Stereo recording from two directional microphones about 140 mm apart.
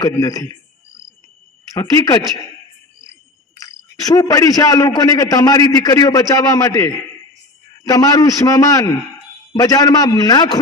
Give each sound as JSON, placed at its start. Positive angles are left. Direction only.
{"t": 0.0, "sound": "a man's voice", "side_deg": 25}
{"t": 1.7, "sound": "a man's voice", "side_deg": 25}
{"t": 3.5, "sound": "a man's voice", "side_deg": 25}